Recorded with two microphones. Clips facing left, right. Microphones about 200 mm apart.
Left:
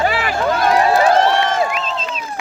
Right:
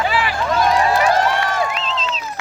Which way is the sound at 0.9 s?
25° left (ahead or behind).